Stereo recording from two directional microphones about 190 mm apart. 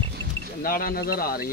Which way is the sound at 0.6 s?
50° left (ahead or behind).